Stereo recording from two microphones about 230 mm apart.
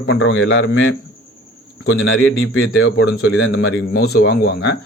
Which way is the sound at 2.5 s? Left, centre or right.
Left.